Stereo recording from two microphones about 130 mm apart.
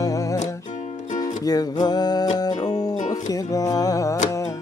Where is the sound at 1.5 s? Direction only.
30° left (ahead or behind).